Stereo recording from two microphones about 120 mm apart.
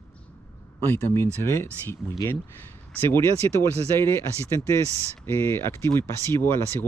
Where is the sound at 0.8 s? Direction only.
20° left (ahead or behind).